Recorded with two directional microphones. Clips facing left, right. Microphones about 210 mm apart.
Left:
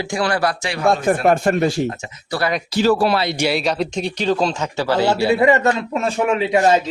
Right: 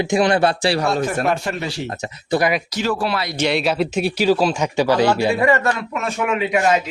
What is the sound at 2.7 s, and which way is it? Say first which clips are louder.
Speech: left 5 dB; 35° left (ahead or behind).